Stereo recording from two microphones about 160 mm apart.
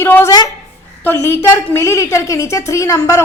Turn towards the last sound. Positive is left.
turn(degrees=20)  # may be behind; listen again after turning